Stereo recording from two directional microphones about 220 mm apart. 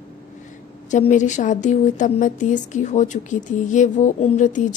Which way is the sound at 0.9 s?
35° left (ahead or behind).